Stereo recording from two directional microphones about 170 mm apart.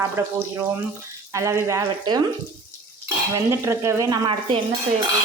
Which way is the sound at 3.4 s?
15° right (ahead or behind).